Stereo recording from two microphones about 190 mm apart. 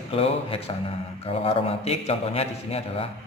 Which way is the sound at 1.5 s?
30° left (ahead or behind).